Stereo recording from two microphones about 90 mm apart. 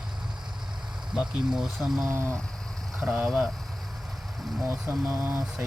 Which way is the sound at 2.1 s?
30° right (ahead or behind).